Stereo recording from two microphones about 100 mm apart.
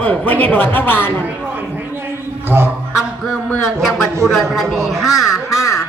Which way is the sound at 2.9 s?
5° right (ahead or behind).